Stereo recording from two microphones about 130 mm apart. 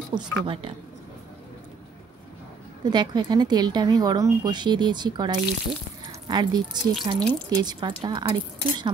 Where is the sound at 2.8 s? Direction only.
35° right (ahead or behind).